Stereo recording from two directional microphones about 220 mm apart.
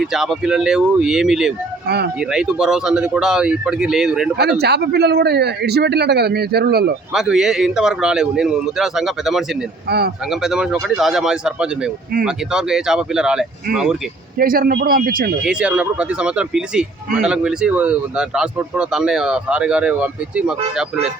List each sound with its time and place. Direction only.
0.0 s speech: centre (ahead or behind)
4.4 s a man's voice: 50° right (ahead or behind)
7.1 s speech: centre (ahead or behind)
10.4 s speech: 5° right (ahead or behind)
14.3 s speech: 40° right (ahead or behind)
15.4 s speech: 5° right (ahead or behind)